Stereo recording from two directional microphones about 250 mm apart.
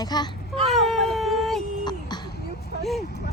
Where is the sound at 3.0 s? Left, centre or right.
Left.